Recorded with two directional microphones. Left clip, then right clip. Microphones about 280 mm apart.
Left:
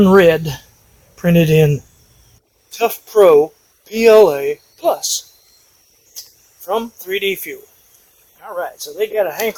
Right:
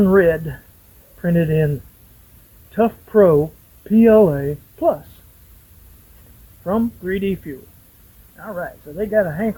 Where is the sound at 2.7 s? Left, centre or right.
Centre.